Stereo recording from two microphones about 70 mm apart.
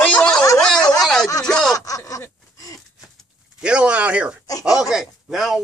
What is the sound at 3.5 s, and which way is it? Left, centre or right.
Speech, centre.